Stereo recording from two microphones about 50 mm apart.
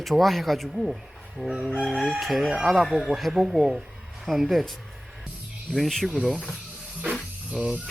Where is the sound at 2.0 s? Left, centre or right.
Centre.